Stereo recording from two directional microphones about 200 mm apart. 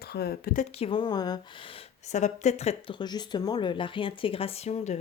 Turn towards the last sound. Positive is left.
turn(degrees=35)  # may be behind; listen again after turning